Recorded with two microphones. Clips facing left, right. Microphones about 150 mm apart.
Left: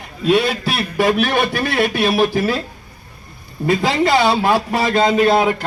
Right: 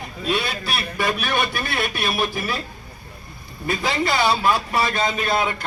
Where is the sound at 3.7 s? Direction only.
90° left.